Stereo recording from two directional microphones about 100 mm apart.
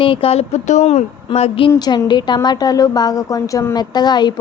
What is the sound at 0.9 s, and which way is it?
Speech, 85° left.